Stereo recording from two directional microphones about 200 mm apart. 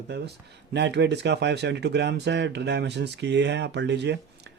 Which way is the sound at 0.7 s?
60° right (ahead or behind).